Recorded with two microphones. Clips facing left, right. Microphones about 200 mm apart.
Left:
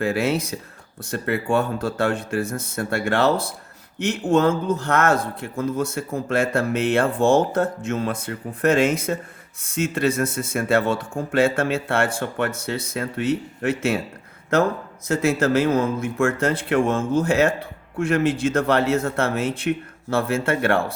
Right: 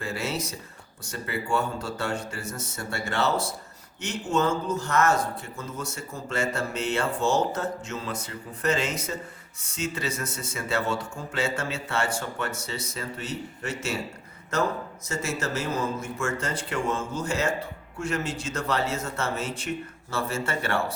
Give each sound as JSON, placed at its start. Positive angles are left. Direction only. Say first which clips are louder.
{"t": 0.0, "sound": "speech", "louder": "left 9 dB", "side_deg": 55}
{"t": 15.0, "sound": "speech", "louder": "left 11 dB", "side_deg": 55}